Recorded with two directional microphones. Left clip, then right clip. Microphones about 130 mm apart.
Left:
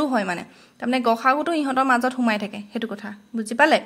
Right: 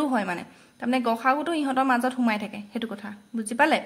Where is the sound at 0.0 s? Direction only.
30° left (ahead or behind).